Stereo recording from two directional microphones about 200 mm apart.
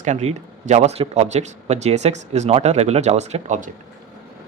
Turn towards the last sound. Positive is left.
turn(degrees=-40)  # may be behind; listen again after turning